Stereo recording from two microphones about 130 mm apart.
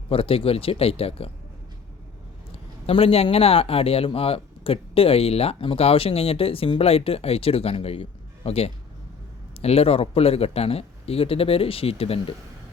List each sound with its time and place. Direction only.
0.1 s speech: 45° left (ahead or behind)
2.8 s speech: 50° left (ahead or behind)